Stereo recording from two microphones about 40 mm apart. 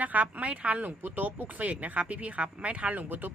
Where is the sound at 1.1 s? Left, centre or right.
Right.